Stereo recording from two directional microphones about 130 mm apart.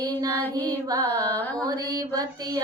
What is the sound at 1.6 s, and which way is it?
Female singing, 30° right (ahead or behind).